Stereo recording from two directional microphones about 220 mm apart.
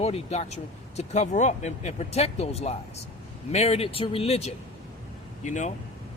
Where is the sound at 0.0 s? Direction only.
30° left (ahead or behind).